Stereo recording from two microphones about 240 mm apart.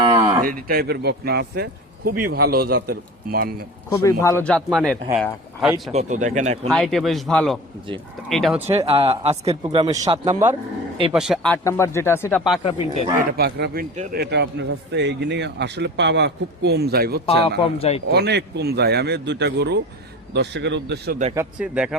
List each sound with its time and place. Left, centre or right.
0.0 s a sound: right
0.4 s speech: right
4.0 s speech: centre
5.9 s speech: right
6.7 s speech: centre
8.8 s speech: right
11.1 s speech: centre
12.6 s speech: left
13.1 s speech: right
14.2 s a man's voice: right
17.2 s speech: left
18.1 s a man's voice: right
21.3 s speech: centre